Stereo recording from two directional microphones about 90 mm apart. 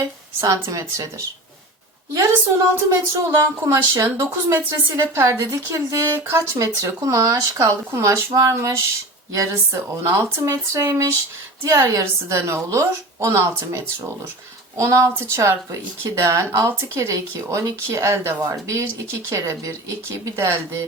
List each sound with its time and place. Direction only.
0.0 s a woman's voice: 35° right (ahead or behind)
2.1 s a woman's voice: 35° right (ahead or behind)